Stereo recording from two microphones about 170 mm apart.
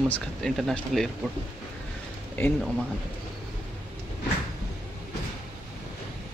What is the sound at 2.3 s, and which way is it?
Speech, 10° left (ahead or behind).